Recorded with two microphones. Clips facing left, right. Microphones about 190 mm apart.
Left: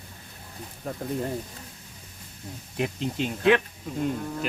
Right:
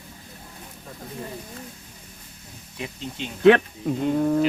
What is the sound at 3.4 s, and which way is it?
Speech, 60° right (ahead or behind).